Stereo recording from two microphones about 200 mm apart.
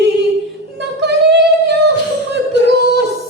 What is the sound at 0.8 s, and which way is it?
Child singing, 60° right (ahead or behind).